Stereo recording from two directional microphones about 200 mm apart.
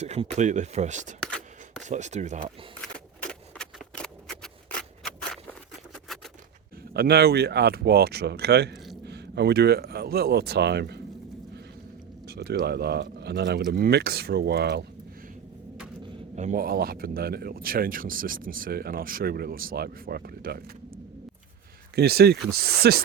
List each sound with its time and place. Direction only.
0.0 s speech: 35° right (ahead or behind)
1.2 s a sound: 5° left (ahead or behind)
1.8 s speech: 35° right (ahead or behind)
2.8 s a sound: 5° left (ahead or behind)
5.9 s typewriter: centre (ahead or behind)
6.9 s speech: 50° right (ahead or behind)
8.7 s a sound: centre (ahead or behind)
9.0 s speech: 55° right (ahead or behind)
12.2 s speech: 50° right (ahead or behind)
16.3 s speech: 40° right (ahead or behind)
21.9 s speech: 50° right (ahead or behind)